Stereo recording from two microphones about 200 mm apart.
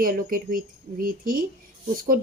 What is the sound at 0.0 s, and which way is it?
A woman's voice, 45° right (ahead or behind).